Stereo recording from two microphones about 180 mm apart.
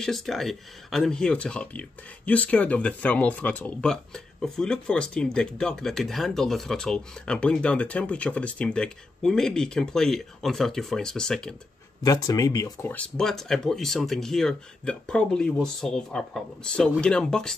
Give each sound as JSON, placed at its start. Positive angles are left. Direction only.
{"t": 0.0, "sound": "speech", "side_deg": 0}
{"t": 12.0, "sound": "speech", "side_deg": 20}
{"t": 12.9, "sound": "speech", "side_deg": 5}